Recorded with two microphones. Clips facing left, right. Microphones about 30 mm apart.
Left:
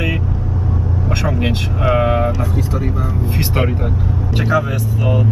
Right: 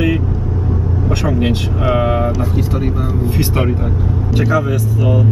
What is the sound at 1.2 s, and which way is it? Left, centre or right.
Vehicle, centre.